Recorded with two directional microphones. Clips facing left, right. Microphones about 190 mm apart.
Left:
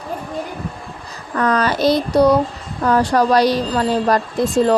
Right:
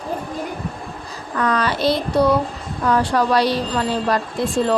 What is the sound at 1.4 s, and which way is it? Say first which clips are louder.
Speech: left 3 dB; 40° left (ahead or behind).